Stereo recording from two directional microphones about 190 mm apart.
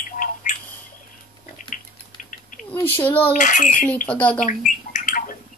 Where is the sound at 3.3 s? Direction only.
40° left (ahead or behind).